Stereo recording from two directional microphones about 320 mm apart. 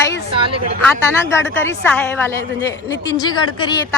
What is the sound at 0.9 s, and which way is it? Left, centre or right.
A woman's voice, centre.